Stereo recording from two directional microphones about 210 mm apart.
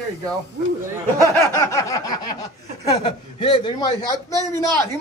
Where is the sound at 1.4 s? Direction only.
15° left (ahead or behind).